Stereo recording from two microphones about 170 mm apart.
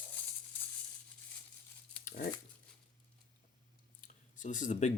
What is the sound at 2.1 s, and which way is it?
Dog, 55° left (ahead or behind).